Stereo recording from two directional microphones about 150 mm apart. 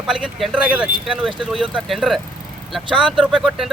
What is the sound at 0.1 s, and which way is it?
Speech, centre (ahead or behind).